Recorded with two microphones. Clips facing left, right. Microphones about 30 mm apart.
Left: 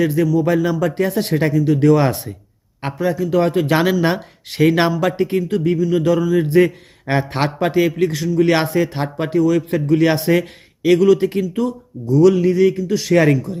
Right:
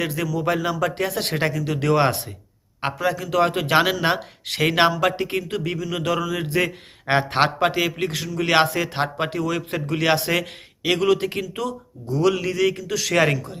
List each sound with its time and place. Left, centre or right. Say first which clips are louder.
0.0 s speech: left 9 dB; right
0.4 s speech: left 5 dB; right
1.5 s speech: left 10 dB; right
1.9 s speech: left 4 dB; right
3.0 s speech: left 4 dB; right
3.7 s speech: left 2 dB; right
4.4 s speech: left 7 dB; right
4.7 s speech: left 2 dB; right
7.1 s speech: even; right
7.6 s speech: left 5 dB; right
13.3 s speech: left 8 dB; right